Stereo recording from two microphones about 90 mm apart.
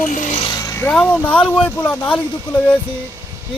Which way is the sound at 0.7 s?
25° left (ahead or behind).